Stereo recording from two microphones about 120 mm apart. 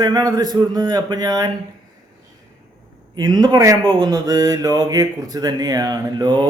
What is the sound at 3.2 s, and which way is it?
Speech, 35° right (ahead or behind).